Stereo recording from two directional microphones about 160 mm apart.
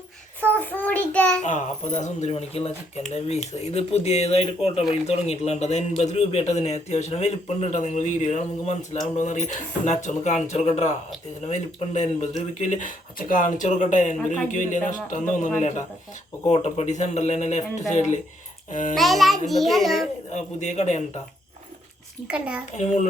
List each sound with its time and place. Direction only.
0.5 s child singing: 10° left (ahead or behind)
1.4 s speech: 50° left (ahead or behind)
16.5 s speech: 45° left (ahead or behind)
18.9 s a child's voice: centre (ahead or behind)
20.3 s speech: 45° left (ahead or behind)
22.3 s a child's voice: 5° right (ahead or behind)